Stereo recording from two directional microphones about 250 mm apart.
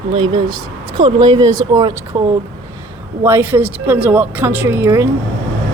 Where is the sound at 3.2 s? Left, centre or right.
Centre.